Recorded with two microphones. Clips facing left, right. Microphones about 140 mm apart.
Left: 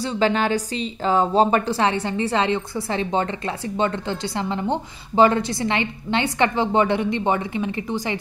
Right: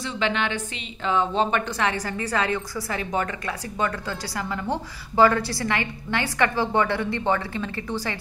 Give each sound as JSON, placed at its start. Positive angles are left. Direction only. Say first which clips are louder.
{"t": 0.0, "sound": "a woman's voice", "louder": "left 5 dB", "side_deg": 40}